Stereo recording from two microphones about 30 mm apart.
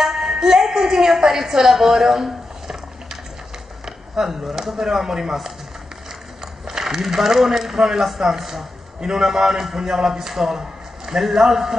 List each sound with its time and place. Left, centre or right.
0.0 s music: centre
1.5 s a sound: centre
4.5 s a man's voice: centre
6.8 s a man's voice: centre
10.3 s a man's voice: centre